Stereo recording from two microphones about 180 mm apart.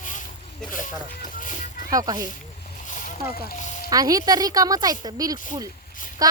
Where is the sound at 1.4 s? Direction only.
45° left (ahead or behind).